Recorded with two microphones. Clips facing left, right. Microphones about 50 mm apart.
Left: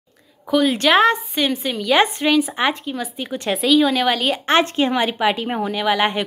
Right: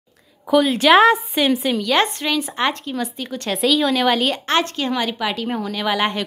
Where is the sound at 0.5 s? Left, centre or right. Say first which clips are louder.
Right 2 dB; centre.